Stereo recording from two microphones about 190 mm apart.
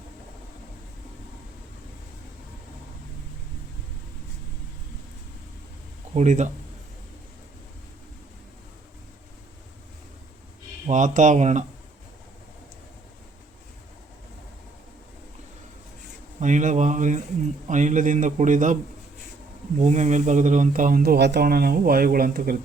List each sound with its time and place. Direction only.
6.1 s speech: 40° right (ahead or behind)
10.8 s speech: 40° right (ahead or behind)
16.4 s speech: 40° right (ahead or behind)
19.8 s speech: 40° right (ahead or behind)